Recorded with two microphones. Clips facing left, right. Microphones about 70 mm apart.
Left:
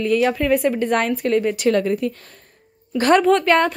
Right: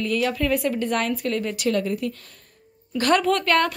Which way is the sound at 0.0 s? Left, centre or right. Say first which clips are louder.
Left 5 dB; left.